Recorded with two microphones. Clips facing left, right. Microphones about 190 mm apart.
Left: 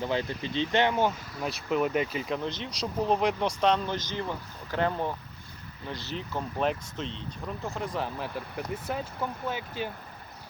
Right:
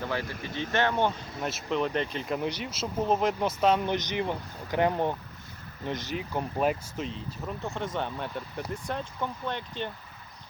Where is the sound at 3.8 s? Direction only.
20° right (ahead or behind); by 9.9 s 5° left (ahead or behind).